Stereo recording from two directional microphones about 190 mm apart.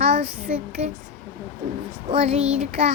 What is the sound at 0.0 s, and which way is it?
Child singing, 35° right (ahead or behind).